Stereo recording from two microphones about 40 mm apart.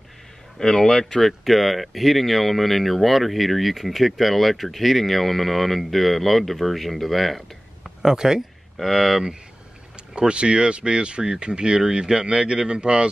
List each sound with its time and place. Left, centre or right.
0.6 s speech: centre
1.2 s speech: centre
8.0 s speech: centre
8.7 s speech: centre
10.1 s speech: right